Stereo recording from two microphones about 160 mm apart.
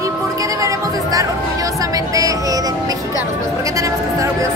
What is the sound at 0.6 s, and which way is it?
Music, 20° right (ahead or behind).